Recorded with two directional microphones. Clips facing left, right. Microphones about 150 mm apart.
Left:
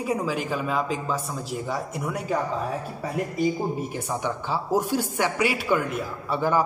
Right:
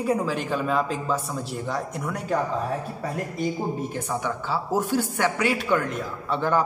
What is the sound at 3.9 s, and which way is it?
Speech, 15° left (ahead or behind).